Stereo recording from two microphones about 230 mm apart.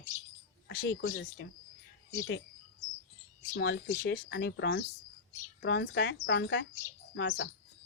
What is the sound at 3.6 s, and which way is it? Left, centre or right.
Speech, left.